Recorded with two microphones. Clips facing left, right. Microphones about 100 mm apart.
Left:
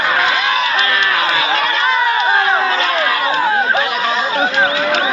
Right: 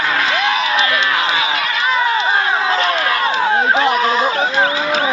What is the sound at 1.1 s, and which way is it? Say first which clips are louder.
Crowd: left 1 dB; 20° right (ahead or behind).